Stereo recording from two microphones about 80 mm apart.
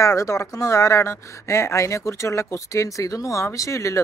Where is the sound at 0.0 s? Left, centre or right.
Left.